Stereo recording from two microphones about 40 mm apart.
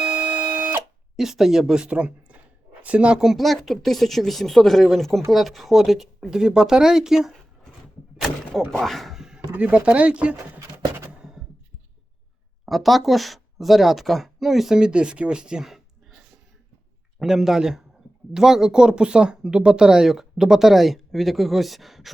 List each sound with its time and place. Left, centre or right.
0.0 s printer: right
1.1 s speech: centre
1.9 s speech: right
3.3 s speech: centre
8.8 s speech: centre
9.5 s speech: right
9.7 s speech: right
12.6 s speech: centre
14.8 s speech: right
17.2 s speech: centre